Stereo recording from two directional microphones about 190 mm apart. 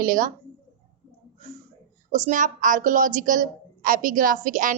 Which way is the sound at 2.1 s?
40° right (ahead or behind).